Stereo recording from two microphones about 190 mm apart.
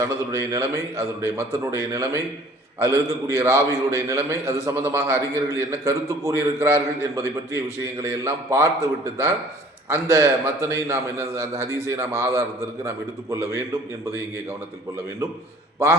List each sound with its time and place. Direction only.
0.0 s a man's voice: 15° right (ahead or behind)